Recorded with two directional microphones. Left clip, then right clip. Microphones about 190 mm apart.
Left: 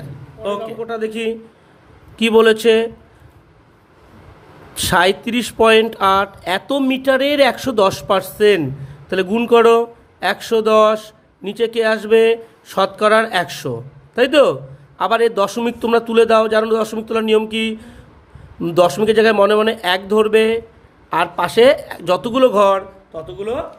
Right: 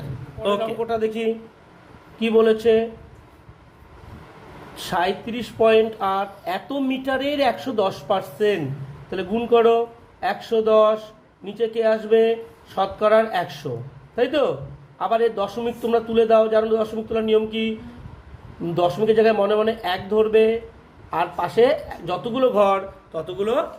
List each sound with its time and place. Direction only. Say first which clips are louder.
0.4 s speech: right 1 dB; centre (ahead or behind)
0.9 s speech: even; 20° left (ahead or behind)
2.1 s speech: left 5 dB; 50° left (ahead or behind)
4.8 s speech: left 8 dB; 45° left (ahead or behind)
23.1 s speech: right 1 dB; centre (ahead or behind)